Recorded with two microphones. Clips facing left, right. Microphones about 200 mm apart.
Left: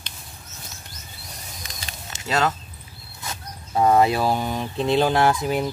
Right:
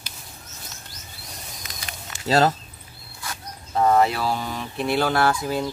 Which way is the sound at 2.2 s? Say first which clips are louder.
Right 4 dB; 35° right (ahead or behind).